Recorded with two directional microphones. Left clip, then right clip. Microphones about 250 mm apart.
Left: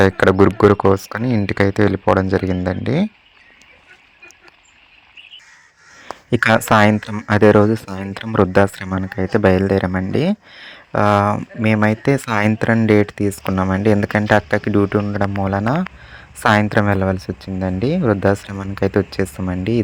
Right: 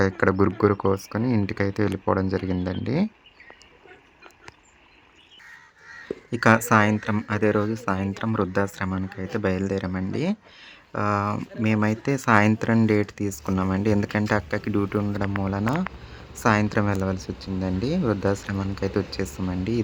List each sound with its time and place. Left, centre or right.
0.0 s speech: centre
6.3 s speech: left